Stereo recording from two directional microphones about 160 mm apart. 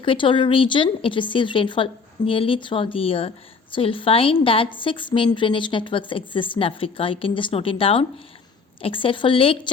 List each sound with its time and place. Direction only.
0.0 s speech: 35° left (ahead or behind)